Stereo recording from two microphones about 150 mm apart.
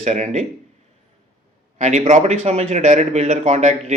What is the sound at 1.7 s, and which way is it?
Speech, 50° right (ahead or behind).